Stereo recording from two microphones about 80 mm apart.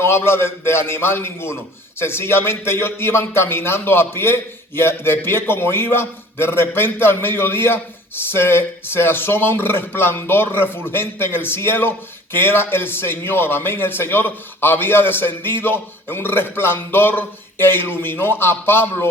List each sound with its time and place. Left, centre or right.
0.0 s a man's voice: left